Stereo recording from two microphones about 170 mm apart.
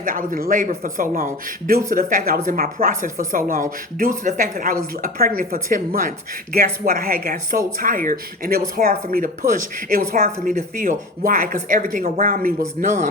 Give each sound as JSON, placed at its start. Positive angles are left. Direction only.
{"t": 0.0, "sound": "a man's voice", "side_deg": -55}